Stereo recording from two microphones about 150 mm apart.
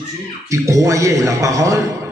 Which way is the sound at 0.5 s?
20° right (ahead or behind).